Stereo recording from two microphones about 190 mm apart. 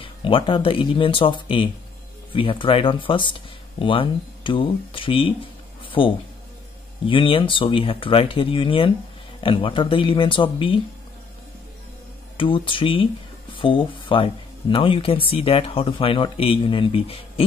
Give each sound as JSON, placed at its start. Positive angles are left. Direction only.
{"t": 0.0, "sound": "speech", "side_deg": 25}
{"t": 5.9, "sound": "a sound", "side_deg": 25}
{"t": 7.1, "sound": "speech", "side_deg": 25}
{"t": 12.4, "sound": "speech", "side_deg": 25}